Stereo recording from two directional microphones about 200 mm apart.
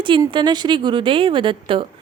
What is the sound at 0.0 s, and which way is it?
A woman's voice, 25° right (ahead or behind).